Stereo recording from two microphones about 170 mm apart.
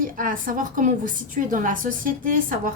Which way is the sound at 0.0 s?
55° right (ahead or behind).